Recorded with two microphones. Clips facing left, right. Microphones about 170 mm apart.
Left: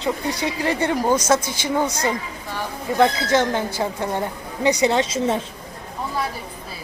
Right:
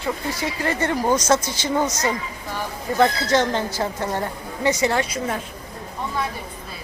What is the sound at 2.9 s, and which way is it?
A woman's voice, 10° left (ahead or behind).